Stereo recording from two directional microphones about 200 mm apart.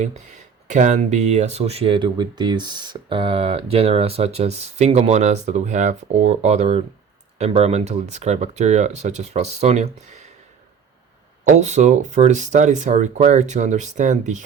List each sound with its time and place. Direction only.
0.0 s speech: 35° right (ahead or behind)
11.4 s speech: 35° right (ahead or behind)